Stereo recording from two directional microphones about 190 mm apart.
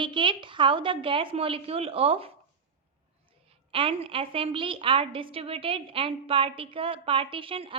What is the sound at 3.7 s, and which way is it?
A woman's voice, 30° right (ahead or behind).